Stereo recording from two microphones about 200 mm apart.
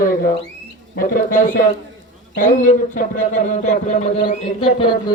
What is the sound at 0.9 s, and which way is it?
A man's voice, 45° left (ahead or behind).